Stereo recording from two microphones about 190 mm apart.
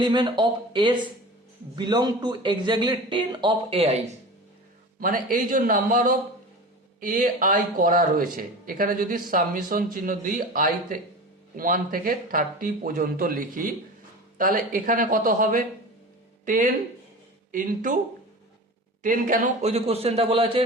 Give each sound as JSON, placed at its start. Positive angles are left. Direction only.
{"t": 0.0, "sound": "a man's voice", "side_deg": -25}
{"t": 4.9, "sound": "speech", "side_deg": -45}
{"t": 19.0, "sound": "a man's voice", "side_deg": -45}